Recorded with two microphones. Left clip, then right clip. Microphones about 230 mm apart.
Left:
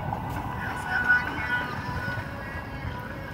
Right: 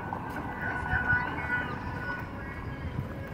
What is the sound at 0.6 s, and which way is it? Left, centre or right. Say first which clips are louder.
Vehicle: left 2 dB; left.